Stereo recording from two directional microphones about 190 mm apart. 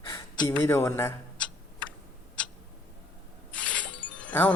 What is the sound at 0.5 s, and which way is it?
Speech, 10° left (ahead or behind).